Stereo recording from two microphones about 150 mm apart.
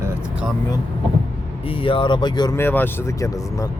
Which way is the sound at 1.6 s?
35° left (ahead or behind).